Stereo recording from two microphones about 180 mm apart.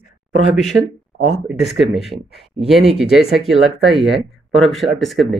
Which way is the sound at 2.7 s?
5° right (ahead or behind).